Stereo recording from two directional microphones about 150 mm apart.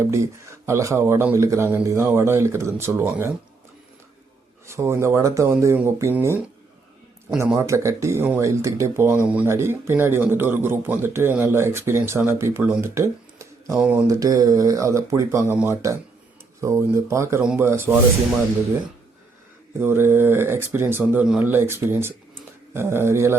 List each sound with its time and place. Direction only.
0.0 s speech: 20° right (ahead or behind)
4.6 s speech: 20° right (ahead or behind)
7.7 s speech: 20° right (ahead or behind)
13.7 s speech: 10° right (ahead or behind)
14.1 s speech: 25° right (ahead or behind)
19.8 s speech: 15° right (ahead or behind)